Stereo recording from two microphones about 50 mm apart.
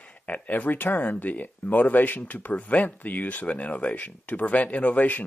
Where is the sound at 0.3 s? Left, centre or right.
Left.